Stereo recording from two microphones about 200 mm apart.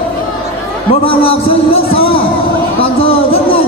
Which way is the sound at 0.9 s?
30° left (ahead or behind).